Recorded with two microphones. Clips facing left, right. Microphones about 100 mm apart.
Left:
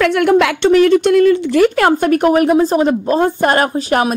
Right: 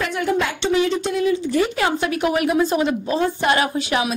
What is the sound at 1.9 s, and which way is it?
A woman's voice, 50° left (ahead or behind).